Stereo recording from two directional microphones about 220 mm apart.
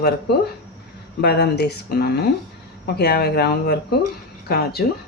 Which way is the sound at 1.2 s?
50° left (ahead or behind).